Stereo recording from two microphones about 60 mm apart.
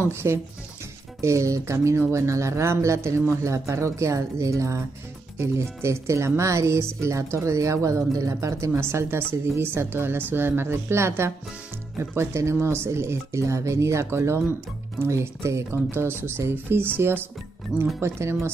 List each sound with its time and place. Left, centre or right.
0.0 s speech: right
1.2 s speech: right
17.7 s speech: centre
18.0 s speech: right